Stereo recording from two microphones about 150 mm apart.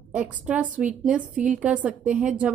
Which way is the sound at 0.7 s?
55° right (ahead or behind).